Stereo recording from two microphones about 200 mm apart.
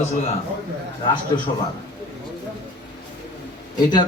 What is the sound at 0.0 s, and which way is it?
Speech, 30° left (ahead or behind).